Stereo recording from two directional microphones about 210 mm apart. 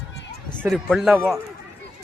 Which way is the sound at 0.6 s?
Centre (ahead or behind).